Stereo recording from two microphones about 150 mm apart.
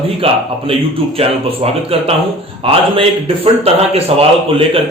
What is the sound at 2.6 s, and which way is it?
A man's voice, 40° right (ahead or behind).